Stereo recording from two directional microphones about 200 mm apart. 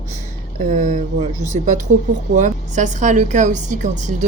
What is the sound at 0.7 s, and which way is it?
A woman's voice, 40° right (ahead or behind).